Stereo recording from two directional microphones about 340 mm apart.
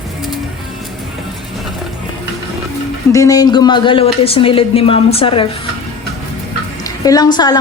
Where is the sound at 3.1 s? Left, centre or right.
Centre.